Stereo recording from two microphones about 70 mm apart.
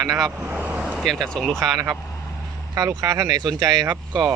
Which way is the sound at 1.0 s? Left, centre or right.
Centre.